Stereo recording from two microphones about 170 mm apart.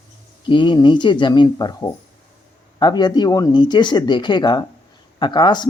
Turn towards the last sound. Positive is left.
turn(degrees=25)  # may be behind; listen again after turning